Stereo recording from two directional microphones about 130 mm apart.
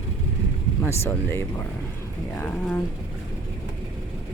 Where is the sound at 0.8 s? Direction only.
20° left (ahead or behind).